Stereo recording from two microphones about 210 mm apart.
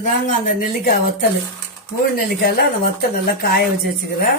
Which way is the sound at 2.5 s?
45° left (ahead or behind).